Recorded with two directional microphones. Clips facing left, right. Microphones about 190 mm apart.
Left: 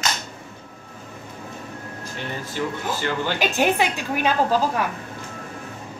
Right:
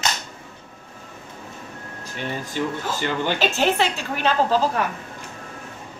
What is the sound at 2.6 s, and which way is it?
Speech, 20° right (ahead or behind).